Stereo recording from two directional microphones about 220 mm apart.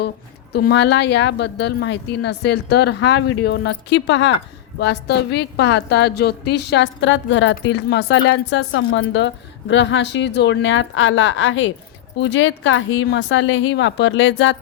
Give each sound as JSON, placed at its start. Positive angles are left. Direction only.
{"t": 0.5, "sound": "a woman's voice", "side_deg": 50}